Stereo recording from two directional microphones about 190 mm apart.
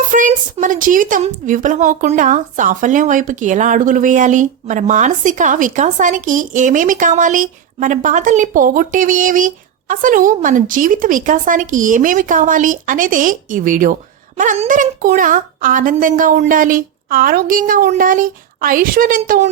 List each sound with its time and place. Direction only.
0.1 s a woman's voice: 40° right (ahead or behind)